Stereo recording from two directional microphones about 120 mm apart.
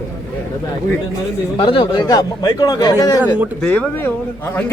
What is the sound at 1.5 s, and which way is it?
A man's voice, 45° left (ahead or behind).